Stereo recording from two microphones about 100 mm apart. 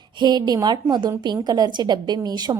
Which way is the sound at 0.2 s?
45° right (ahead or behind).